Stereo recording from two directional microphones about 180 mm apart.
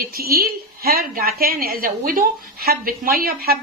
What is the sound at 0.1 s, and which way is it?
A woman's voice, 60° right (ahead or behind).